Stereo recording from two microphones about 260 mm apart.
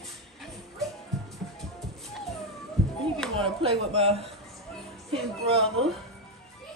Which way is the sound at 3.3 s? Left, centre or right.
Right.